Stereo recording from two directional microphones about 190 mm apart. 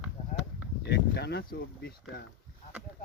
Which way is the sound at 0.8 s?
60° left (ahead or behind).